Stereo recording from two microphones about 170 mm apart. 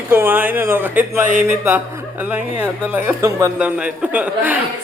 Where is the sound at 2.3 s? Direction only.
10° right (ahead or behind).